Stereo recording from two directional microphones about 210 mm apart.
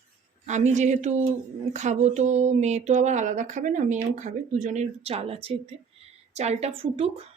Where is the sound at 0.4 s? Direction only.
35° right (ahead or behind).